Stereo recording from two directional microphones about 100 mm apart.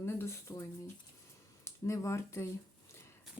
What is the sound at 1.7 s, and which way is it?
Speech, 30° left (ahead or behind).